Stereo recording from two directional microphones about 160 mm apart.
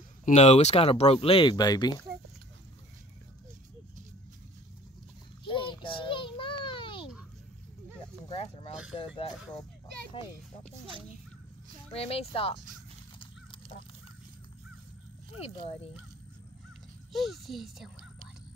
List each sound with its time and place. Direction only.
0.2 s speech: 45° left (ahead or behind); by 2.0 s 25° left (ahead or behind)
5.4 s child singing: 30° left (ahead or behind)
8.3 s a sound: 35° left (ahead or behind)
8.9 s speech: 35° left (ahead or behind)
11.9 s speech: 40° left (ahead or behind)
13.2 s horse: 30° left (ahead or behind)
15.4 s speech: 35° left (ahead or behind)
17.1 s speech: centre (ahead or behind)